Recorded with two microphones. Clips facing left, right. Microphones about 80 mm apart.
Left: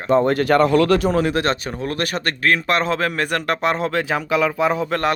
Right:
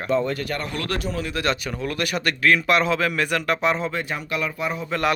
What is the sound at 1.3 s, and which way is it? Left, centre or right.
A man's voice, left.